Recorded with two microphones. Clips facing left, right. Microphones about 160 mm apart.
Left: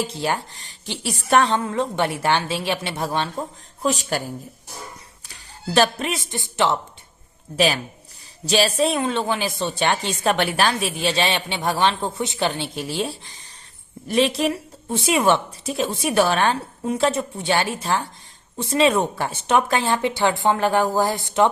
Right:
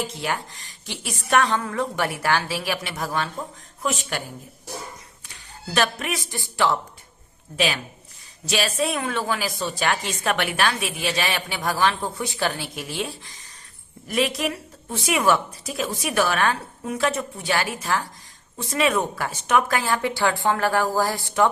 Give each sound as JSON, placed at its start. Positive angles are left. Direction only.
{"t": 0.0, "sound": "a woman's voice", "side_deg": 30}
{"t": 5.7, "sound": "a woman's voice", "side_deg": 30}
{"t": 7.5, "sound": "a woman's voice", "side_deg": 40}